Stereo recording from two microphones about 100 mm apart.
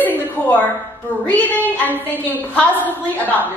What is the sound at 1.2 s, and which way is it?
A woman's voice, 15° left (ahead or behind).